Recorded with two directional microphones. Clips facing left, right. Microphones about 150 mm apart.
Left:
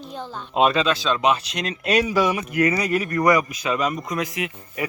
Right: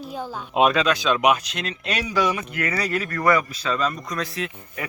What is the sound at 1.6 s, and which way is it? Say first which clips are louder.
Speech: left 6 dB; 40° left (ahead or behind).